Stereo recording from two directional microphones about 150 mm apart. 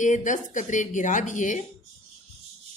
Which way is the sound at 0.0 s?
55° left (ahead or behind).